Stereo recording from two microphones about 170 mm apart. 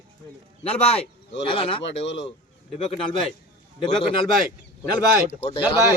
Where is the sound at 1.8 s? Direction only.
90° left.